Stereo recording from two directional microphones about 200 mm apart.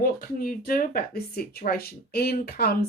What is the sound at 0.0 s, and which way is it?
Speech, 45° left (ahead or behind).